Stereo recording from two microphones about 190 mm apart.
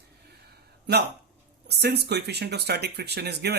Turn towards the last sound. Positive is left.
turn(degrees=-60)  # may be behind; listen again after turning